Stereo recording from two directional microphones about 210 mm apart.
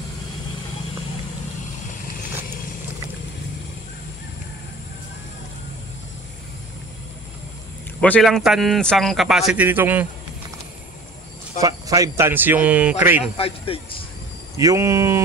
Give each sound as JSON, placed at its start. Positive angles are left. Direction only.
{"t": 8.0, "sound": "a man's voice", "side_deg": 5}
{"t": 11.6, "sound": "speech", "side_deg": -15}
{"t": 13.7, "sound": "speech", "side_deg": 25}
{"t": 14.6, "sound": "speech", "side_deg": -15}